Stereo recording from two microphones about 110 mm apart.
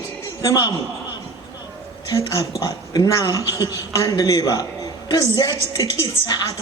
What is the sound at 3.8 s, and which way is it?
A woman's voice, 30° left (ahead or behind).